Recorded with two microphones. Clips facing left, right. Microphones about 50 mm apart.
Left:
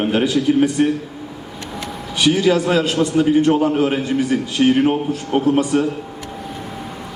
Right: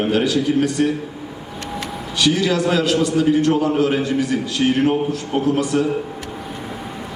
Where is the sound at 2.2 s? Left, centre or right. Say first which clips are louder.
Left 2 dB; centre.